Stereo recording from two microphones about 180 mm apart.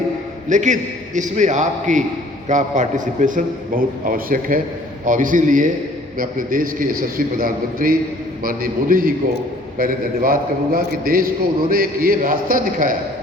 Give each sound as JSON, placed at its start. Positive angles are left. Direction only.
{"t": 0.4, "sound": "a man's voice", "side_deg": -45}